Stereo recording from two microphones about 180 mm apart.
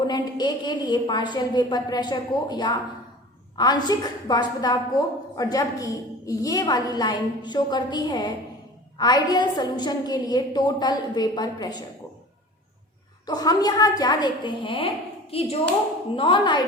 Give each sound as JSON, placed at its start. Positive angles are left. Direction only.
{"t": 0.1, "sound": "a woman's voice", "side_deg": 25}
{"t": 13.2, "sound": "a woman's voice", "side_deg": 20}